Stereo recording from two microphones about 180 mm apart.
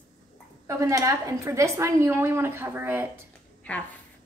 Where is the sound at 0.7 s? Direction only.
15° right (ahead or behind).